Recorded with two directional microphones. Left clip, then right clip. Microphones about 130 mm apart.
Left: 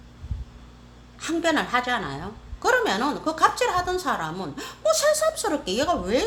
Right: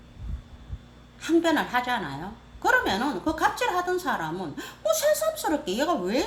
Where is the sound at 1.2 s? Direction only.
25° left (ahead or behind).